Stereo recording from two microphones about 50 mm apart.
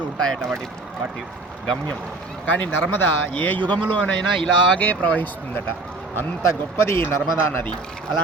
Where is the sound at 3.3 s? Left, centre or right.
Left.